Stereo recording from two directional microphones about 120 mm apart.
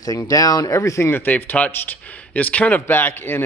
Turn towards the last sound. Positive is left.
turn(degrees=20)  # may be behind; listen again after turning